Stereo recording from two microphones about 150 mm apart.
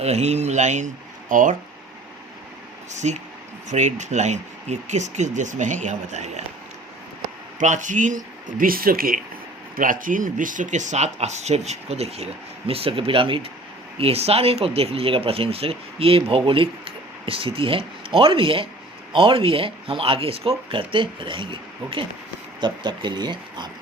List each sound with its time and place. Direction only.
0.0 s speech: 45° right (ahead or behind)
2.9 s speech: 50° right (ahead or behind)
7.6 s speech: 55° right (ahead or behind); by 23.6 s 30° right (ahead or behind)